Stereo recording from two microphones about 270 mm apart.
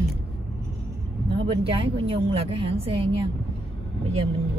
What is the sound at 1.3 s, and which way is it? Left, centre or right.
A woman's voice, centre.